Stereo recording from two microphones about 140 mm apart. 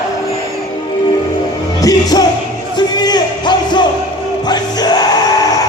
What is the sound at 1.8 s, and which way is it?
Music, 25° left (ahead or behind).